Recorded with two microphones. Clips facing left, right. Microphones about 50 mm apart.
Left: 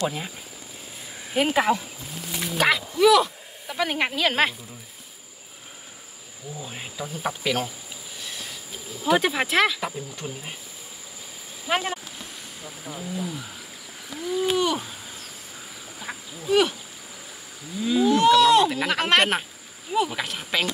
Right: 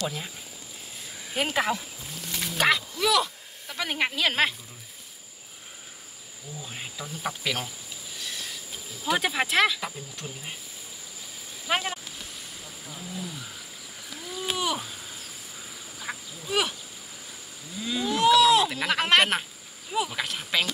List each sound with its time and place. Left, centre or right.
0.0 s speech: centre
1.3 s speech: centre
6.6 s speech: centre
8.2 s a sound: centre
9.0 s speech: centre
11.6 s a sound: centre
12.6 s speech: centre
13.0 s speech: centre
14.2 s a sound: centre
17.7 s speech: centre